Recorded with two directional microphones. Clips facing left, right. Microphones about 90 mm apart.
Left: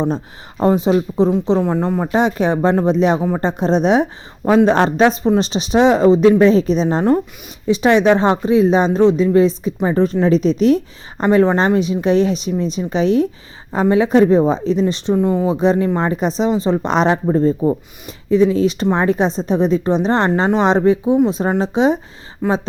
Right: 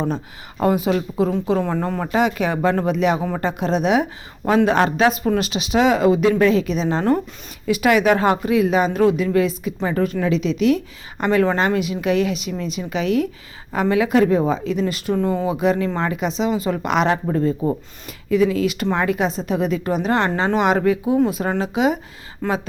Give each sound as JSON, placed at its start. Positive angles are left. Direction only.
{"t": 0.6, "sound": "a woman's voice", "side_deg": 25}
{"t": 2.1, "sound": "a woman's voice", "side_deg": 30}
{"t": 3.2, "sound": "speech", "side_deg": 20}
{"t": 3.4, "sound": "a woman's voice", "side_deg": 30}
{"t": 4.5, "sound": "a woman's voice", "side_deg": -5}
{"t": 4.8, "sound": "a woman's voice", "side_deg": 35}
{"t": 15.1, "sound": "a woman's voice", "side_deg": 15}
{"t": 22.4, "sound": "speech", "side_deg": 15}